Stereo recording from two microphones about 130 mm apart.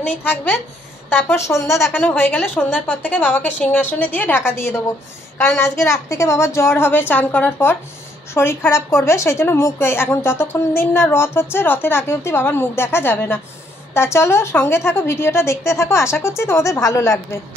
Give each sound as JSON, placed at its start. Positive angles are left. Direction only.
{"t": 0.2, "sound": "a woman's voice", "side_deg": 15}